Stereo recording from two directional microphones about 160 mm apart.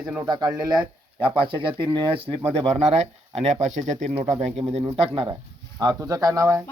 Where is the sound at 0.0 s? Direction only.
10° right (ahead or behind).